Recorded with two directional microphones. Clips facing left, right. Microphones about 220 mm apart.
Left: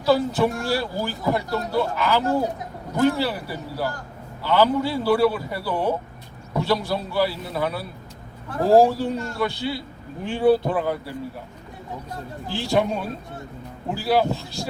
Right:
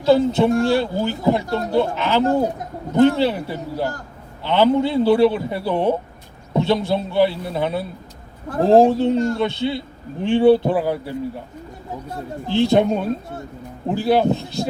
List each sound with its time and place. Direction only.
0.0 s speech: 25° right (ahead or behind)
12.5 s speech: 20° right (ahead or behind)